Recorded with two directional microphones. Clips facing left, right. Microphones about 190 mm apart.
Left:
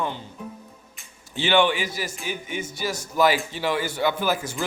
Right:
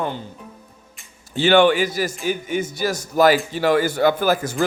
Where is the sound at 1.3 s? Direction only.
40° right (ahead or behind).